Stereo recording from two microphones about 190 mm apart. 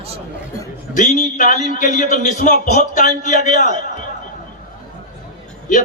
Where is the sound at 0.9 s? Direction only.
40° left (ahead or behind).